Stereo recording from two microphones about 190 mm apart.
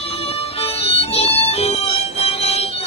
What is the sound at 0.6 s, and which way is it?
Music, 30° left (ahead or behind).